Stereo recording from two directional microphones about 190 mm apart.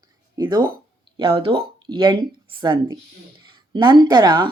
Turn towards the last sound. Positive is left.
turn(degrees=-25)  # may be behind; listen again after turning